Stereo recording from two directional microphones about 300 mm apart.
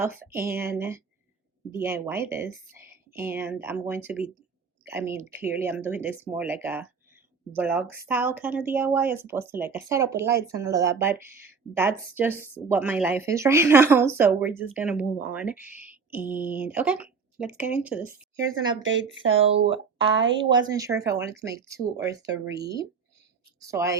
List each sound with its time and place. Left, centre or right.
0.3 s a woman's voice: centre
18.8 s speech: right
20.4 s a woman's voice: centre
23.6 s a woman's voice: centre